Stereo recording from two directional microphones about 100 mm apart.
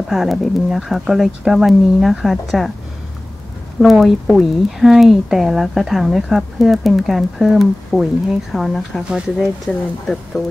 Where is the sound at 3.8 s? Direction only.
Centre (ahead or behind).